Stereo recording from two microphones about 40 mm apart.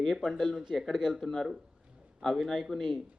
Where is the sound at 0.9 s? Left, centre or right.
Centre.